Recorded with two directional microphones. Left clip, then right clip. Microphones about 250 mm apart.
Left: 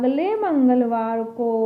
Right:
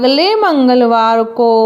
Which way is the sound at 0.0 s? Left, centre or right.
Right.